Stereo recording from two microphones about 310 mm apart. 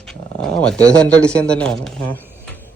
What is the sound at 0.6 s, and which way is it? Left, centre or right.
Speech, centre.